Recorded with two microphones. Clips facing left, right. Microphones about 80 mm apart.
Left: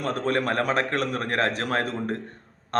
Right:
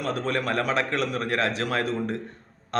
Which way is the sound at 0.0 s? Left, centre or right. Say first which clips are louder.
Left 2 dB; left.